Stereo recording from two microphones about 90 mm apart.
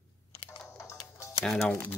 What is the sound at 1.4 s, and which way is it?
Speech, 10° left (ahead or behind).